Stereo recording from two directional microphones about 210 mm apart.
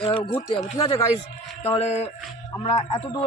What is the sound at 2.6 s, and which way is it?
Speech, 25° left (ahead or behind).